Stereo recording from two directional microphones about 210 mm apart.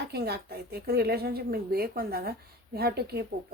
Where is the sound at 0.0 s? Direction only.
50° right (ahead or behind).